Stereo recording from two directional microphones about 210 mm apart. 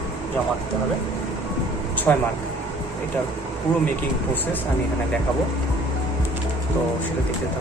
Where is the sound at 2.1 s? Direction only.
10° left (ahead or behind).